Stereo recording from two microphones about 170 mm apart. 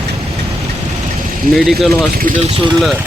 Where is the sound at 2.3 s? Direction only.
55° right (ahead or behind).